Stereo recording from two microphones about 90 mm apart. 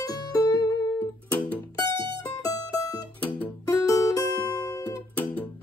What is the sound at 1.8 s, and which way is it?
Music, 65° right (ahead or behind).